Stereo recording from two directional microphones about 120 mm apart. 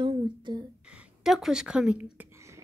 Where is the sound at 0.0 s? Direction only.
40° right (ahead or behind).